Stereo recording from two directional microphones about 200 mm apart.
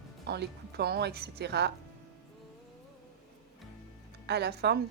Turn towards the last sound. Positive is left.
turn(degrees=-55)  # may be behind; listen again after turning